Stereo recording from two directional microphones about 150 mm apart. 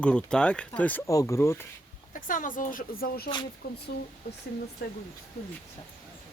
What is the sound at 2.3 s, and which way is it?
Speech, 60° left (ahead or behind).